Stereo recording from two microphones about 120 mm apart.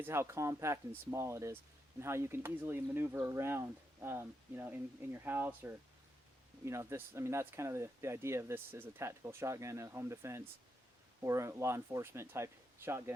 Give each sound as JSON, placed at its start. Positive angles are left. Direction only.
{"t": 0.0, "sound": "speech", "side_deg": -20}